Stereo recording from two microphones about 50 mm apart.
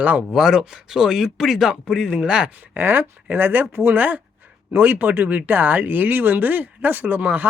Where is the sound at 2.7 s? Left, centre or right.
Right.